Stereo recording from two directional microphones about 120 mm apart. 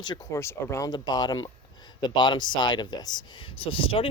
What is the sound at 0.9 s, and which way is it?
Speech, 35° left (ahead or behind).